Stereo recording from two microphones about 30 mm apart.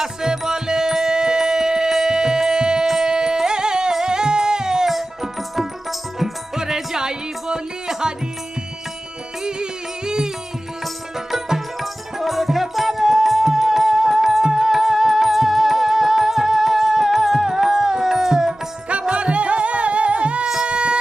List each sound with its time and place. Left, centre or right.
0.0 s music: centre
2.1 s music: right
2.8 s music: centre
3.1 s carnatic music: centre
4.0 s music: right
4.9 s music: centre
6.6 s music: centre
9.4 s music: right
11.3 s music: centre
19.0 s music: right
20.4 s music: centre
20.7 s a sound: right